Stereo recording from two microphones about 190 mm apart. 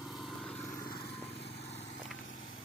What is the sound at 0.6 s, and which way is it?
Vehicle, 20° left (ahead or behind).